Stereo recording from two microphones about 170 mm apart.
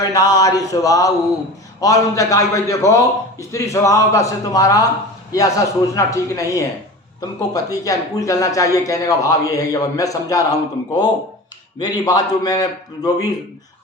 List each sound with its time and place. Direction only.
0.0 s speech: 20° left (ahead or behind)